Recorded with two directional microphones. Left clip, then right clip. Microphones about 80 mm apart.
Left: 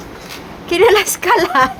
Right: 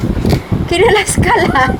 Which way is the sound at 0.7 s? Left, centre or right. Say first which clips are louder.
Even; left.